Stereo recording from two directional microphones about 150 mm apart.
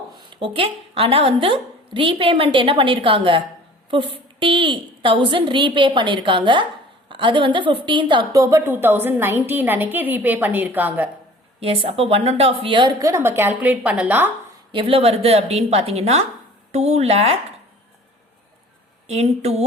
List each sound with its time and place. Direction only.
0.1 s a woman's voice: 35° right (ahead or behind); by 11.1 s 10° right (ahead or behind)
11.6 s a woman's voice: 40° right (ahead or behind); by 14.3 s 10° right (ahead or behind)
14.7 s a woman's voice: 35° right (ahead or behind)
19.0 s a woman's voice: 45° right (ahead or behind)